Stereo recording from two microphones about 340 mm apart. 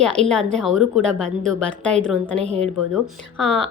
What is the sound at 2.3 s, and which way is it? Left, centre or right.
Speech, centre.